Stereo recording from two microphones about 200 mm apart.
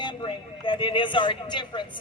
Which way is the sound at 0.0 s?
25° left (ahead or behind).